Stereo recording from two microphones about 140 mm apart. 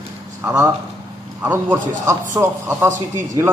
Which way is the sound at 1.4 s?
15° right (ahead or behind).